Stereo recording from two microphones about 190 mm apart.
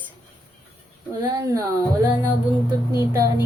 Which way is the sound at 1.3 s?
20° right (ahead or behind).